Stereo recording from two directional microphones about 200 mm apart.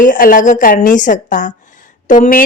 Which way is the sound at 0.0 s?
40° left (ahead or behind).